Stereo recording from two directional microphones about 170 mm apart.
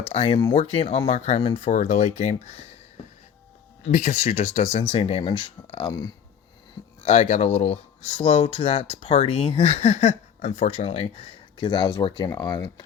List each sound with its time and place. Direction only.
0.1 s speech: 35° left (ahead or behind)
3.9 s speech: 45° left (ahead or behind)
7.0 s speech: 40° left (ahead or behind); by 12.8 s 25° left (ahead or behind)